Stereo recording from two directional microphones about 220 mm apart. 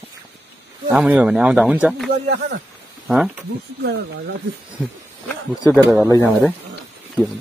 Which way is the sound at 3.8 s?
50° right (ahead or behind).